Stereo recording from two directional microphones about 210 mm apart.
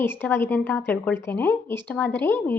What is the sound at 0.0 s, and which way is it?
A woman's voice, 10° left (ahead or behind).